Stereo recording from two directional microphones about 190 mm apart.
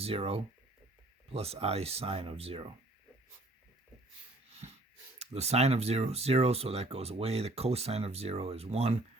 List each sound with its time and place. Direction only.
0.0 s speech: 30° right (ahead or behind)
5.2 s speech: 35° right (ahead or behind)